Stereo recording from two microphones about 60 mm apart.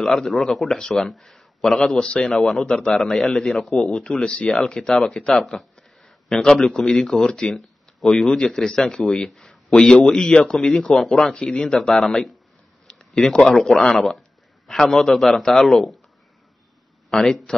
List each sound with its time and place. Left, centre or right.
0.0 s a man's voice: centre
2.0 s a man's voice: centre
4.0 s a man's voice: centre
12.8 s a sound: centre
13.5 s a man's voice: centre
14.9 s a man's voice: centre
17.1 s a man's voice: centre